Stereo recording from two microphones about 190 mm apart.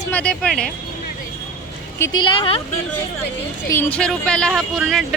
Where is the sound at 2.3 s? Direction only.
25° left (ahead or behind).